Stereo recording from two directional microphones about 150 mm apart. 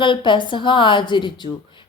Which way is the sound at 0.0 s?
30° left (ahead or behind).